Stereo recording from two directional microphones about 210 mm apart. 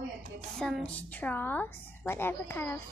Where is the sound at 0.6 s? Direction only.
Centre (ahead or behind).